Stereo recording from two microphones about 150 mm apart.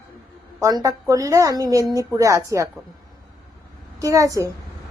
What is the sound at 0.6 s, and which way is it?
A woman's voice, 25° right (ahead or behind).